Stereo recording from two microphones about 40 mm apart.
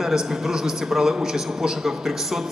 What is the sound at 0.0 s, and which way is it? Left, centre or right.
A man's voice, centre.